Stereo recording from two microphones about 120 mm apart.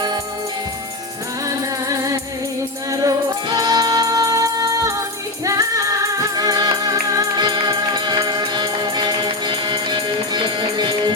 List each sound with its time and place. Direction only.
1.9 s music: 25° right (ahead or behind)